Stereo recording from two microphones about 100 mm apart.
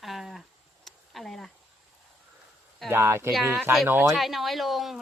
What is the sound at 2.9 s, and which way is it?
Speech, 25° right (ahead or behind).